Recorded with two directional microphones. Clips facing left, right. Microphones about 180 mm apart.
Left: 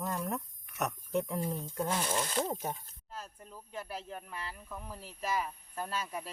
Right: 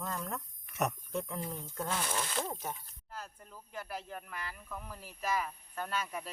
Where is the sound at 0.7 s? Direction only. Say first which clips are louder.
Right 2 dB; centre (ahead or behind).